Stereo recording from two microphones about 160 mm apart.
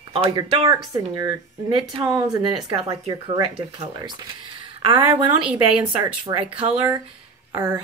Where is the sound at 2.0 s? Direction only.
25° right (ahead or behind).